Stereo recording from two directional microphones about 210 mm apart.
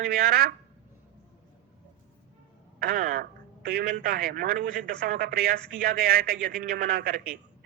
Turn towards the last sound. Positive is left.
turn(degrees=-45)  # may be behind; listen again after turning